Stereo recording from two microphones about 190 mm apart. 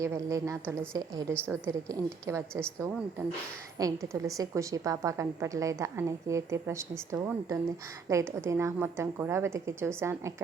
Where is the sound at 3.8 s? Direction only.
15° right (ahead or behind).